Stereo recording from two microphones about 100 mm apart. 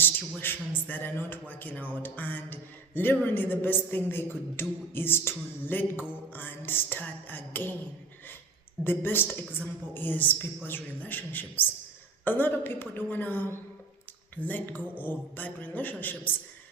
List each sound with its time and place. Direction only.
0.0 s a man's voice: 20° left (ahead or behind)
8.8 s a man's voice: 20° left (ahead or behind)